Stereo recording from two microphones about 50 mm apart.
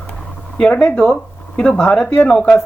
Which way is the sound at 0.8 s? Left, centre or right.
Centre.